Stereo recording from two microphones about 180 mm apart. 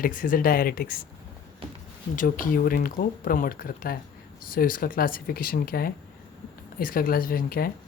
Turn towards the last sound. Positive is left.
turn(degrees=55)  # may be behind; listen again after turning